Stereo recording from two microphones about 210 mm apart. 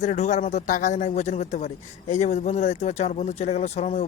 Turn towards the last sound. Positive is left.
turn(degrees=30)  # may be behind; listen again after turning